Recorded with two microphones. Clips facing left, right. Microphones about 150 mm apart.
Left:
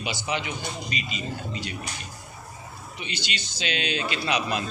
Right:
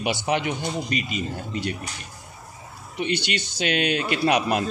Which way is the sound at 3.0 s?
60° right (ahead or behind).